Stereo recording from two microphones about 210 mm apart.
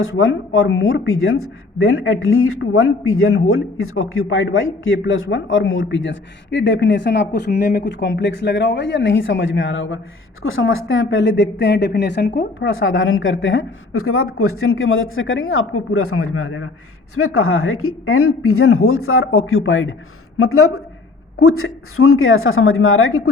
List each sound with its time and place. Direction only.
0.0 s a woman's voice: 70° left (ahead or behind)
20.4 s a woman's voice: 90° left